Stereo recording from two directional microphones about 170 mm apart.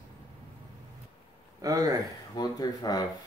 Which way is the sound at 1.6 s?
20° right (ahead or behind).